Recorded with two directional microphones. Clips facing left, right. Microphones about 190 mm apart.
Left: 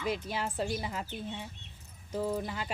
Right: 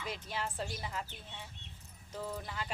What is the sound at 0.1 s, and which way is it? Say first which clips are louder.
Speech: left 5 dB; 10° left (ahead or behind).